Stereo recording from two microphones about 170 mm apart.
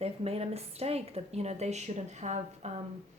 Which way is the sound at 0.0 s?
35° right (ahead or behind).